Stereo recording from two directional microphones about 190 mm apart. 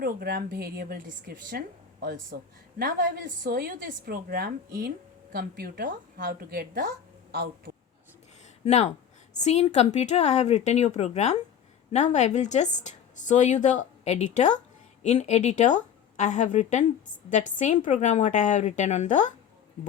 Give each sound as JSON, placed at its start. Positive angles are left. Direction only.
{"t": 0.0, "sound": "a woman's voice", "side_deg": -50}
{"t": 8.6, "sound": "a woman's voice", "side_deg": 35}